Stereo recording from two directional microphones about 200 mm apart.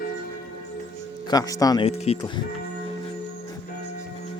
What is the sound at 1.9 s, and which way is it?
Speech, 30° left (ahead or behind).